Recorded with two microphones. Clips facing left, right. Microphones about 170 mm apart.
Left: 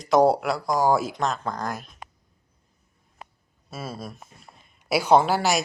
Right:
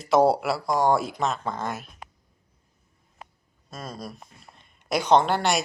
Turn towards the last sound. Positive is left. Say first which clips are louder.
# left 1 dB
turn(degrees=5)  # may be behind; listen again after turning